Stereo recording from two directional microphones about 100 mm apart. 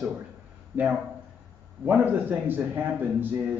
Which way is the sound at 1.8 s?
20° right (ahead or behind).